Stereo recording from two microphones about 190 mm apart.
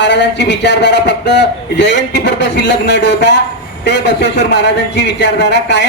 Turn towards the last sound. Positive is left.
turn(degrees=65)  # may be behind; listen again after turning